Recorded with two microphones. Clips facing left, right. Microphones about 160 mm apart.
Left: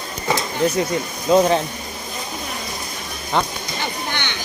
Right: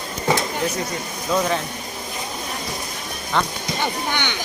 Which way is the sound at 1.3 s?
30° left (ahead or behind).